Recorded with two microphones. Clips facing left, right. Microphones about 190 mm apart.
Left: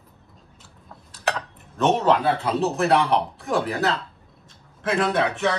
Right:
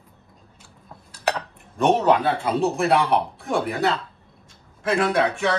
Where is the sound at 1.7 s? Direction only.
10° right (ahead or behind).